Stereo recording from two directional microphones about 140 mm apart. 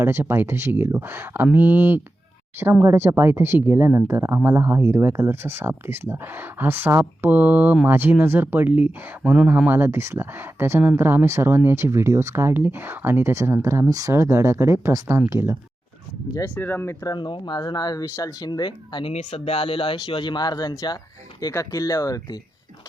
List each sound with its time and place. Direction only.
0.0 s speech: 15° right (ahead or behind)
16.3 s speech: 15° left (ahead or behind)